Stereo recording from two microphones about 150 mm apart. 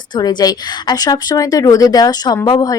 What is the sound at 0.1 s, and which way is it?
Speech, 25° left (ahead or behind).